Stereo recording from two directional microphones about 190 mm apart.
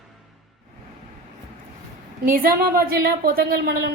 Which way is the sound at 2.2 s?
50° right (ahead or behind).